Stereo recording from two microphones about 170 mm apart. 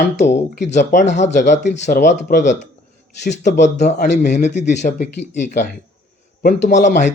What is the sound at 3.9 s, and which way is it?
Speech, 75° left (ahead or behind).